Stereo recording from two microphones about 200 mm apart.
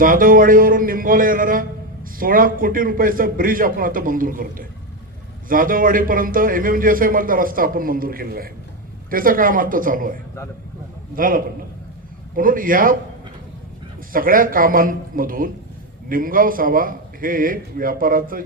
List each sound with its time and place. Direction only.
0.0 s a man's voice: 45° right (ahead or behind)
14.1 s a man's voice: 45° right (ahead or behind)